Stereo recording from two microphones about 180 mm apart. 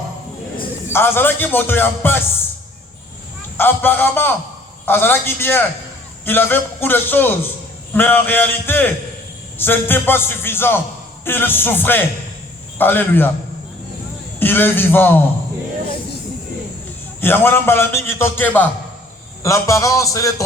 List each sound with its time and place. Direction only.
0.9 s a man's voice: 10° left (ahead or behind)
3.6 s a man's voice: 10° left (ahead or behind)
14.3 s a man's voice: 10° left (ahead or behind)
17.2 s a man's voice: 10° left (ahead or behind)